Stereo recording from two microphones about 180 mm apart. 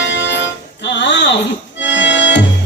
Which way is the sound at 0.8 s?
75° left (ahead or behind).